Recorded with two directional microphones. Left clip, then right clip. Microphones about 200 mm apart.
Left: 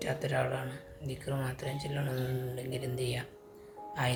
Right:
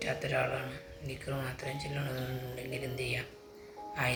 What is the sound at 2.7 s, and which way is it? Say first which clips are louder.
Speech: right 1 dB; 60° left (ahead or behind).